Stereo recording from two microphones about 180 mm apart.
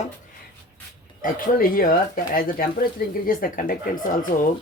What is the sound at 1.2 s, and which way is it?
Speech, 50° left (ahead or behind).